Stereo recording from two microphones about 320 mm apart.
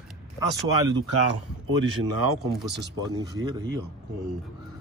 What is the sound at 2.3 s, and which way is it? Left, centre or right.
Speech, right.